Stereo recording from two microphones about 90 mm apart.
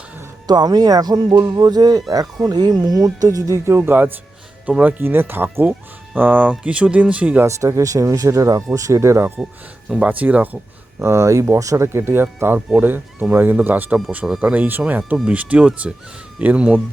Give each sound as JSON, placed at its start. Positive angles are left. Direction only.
{"t": 0.4, "sound": "speech", "side_deg": -50}
{"t": 7.4, "sound": "speech", "side_deg": -35}
{"t": 10.1, "sound": "speech", "side_deg": -20}
{"t": 11.0, "sound": "speech", "side_deg": -30}
{"t": 14.3, "sound": "speech", "side_deg": -5}
{"t": 14.5, "sound": "speech", "side_deg": -20}